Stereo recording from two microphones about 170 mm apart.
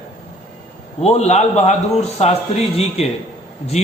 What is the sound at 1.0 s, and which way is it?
A man's voice, 40° left (ahead or behind).